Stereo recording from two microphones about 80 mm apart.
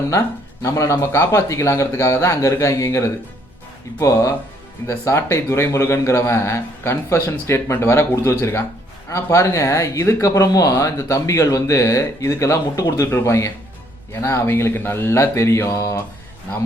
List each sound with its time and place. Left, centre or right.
0.1 s speech: left